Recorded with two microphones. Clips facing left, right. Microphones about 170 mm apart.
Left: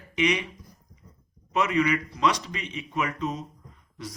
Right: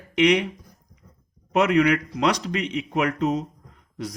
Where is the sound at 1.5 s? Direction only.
75° right (ahead or behind).